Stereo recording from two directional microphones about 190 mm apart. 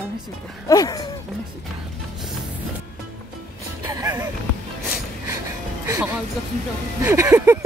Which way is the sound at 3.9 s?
15° right (ahead or behind).